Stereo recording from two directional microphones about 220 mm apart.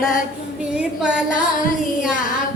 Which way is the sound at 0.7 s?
5° right (ahead or behind).